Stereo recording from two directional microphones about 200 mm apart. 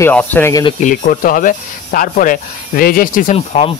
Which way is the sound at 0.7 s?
40° left (ahead or behind).